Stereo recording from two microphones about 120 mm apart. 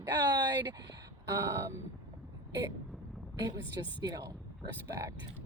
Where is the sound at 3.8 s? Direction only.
35° right (ahead or behind).